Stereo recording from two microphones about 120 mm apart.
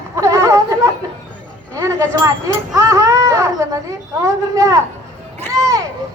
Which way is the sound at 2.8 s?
25° right (ahead or behind).